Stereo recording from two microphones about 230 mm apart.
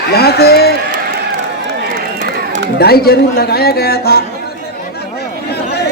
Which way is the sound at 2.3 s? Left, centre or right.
Right.